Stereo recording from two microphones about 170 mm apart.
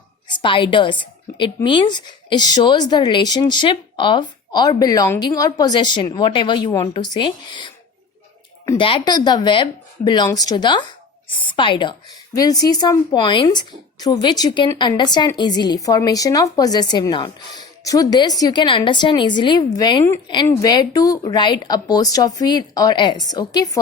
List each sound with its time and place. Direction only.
0.3 s speech: 30° left (ahead or behind)
8.8 s speech: 30° left (ahead or behind)